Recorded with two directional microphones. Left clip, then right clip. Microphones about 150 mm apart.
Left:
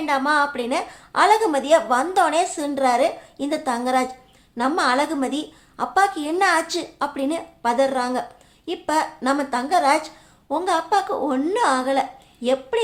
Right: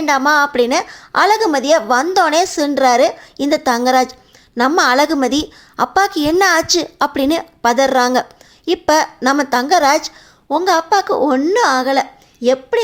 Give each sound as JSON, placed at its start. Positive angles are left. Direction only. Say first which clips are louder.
{"t": 0.0, "sound": "a woman's voice", "louder": "right 7 dB", "side_deg": -40}